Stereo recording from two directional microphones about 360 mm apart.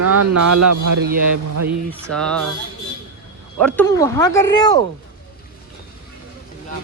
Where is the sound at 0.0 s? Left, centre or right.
Right.